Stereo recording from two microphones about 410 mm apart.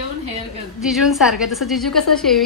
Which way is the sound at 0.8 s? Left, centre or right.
Centre.